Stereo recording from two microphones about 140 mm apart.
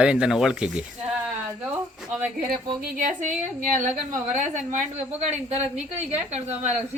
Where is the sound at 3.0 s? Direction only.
70° right (ahead or behind).